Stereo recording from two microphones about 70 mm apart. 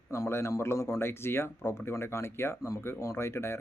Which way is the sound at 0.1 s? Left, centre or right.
Left.